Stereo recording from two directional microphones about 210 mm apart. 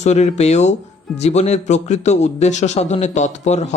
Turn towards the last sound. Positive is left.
turn(degrees=30)  # may be behind; listen again after turning